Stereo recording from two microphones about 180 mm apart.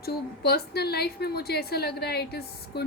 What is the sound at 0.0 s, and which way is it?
A woman's voice, 60° left (ahead or behind).